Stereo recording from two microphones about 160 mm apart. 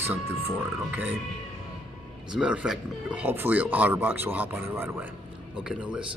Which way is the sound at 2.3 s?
5° right (ahead or behind).